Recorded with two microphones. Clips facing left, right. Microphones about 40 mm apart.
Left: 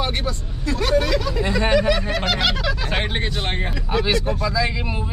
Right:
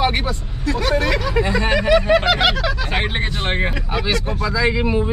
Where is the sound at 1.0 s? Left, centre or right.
Right.